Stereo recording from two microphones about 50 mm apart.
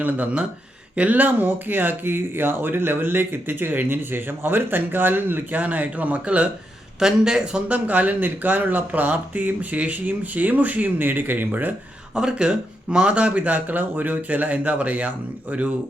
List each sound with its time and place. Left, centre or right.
0.9 s speech: right
7.0 s speech: centre
7.7 s speech: right
12.1 s speech: centre